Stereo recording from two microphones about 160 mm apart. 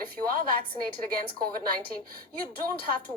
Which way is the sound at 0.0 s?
65° right (ahead or behind).